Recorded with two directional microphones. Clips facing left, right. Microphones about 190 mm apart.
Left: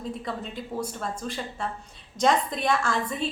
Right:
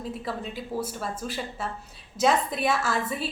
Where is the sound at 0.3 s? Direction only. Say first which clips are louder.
Right 1 dB; 5° right (ahead or behind).